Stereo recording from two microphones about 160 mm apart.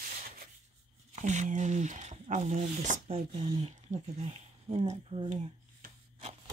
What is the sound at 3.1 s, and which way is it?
Speech, 30° right (ahead or behind).